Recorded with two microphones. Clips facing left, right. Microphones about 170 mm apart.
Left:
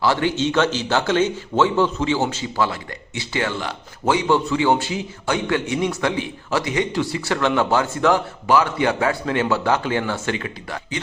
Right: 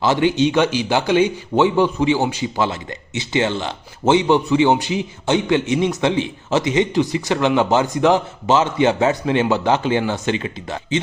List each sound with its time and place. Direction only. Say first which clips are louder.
0.0 s a man's voice: right 4 dB; 20° right (ahead or behind)